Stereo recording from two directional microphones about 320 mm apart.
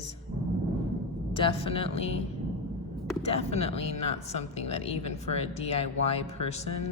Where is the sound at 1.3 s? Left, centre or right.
Centre.